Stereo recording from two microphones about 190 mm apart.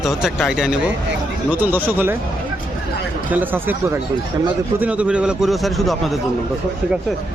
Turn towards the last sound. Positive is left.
turn(degrees=0)  # may be behind; listen again after turning